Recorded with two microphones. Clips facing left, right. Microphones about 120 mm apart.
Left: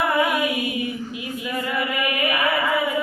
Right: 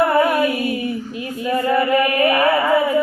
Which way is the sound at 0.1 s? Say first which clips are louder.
Right 5 dB; 40° right (ahead or behind).